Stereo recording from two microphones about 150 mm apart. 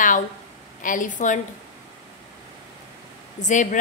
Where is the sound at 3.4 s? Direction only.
55° left (ahead or behind).